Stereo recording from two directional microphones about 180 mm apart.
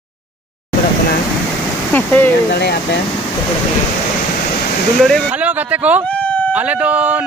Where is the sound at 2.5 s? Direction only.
65° left (ahead or behind).